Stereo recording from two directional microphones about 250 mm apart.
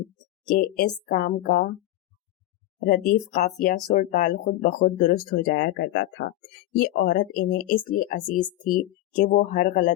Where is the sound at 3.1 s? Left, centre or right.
Left.